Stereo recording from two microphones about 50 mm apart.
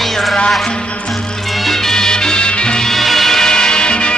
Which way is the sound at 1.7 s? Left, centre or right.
Centre.